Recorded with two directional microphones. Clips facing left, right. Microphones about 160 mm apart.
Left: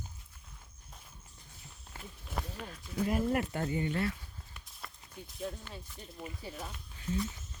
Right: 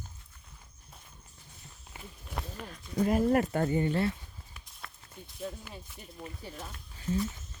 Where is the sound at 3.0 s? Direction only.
45° right (ahead or behind).